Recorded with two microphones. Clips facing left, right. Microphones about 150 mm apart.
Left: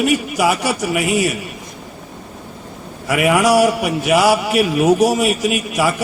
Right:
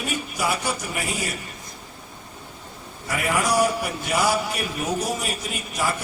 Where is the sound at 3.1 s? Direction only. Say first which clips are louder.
Left 10 dB; 80° left.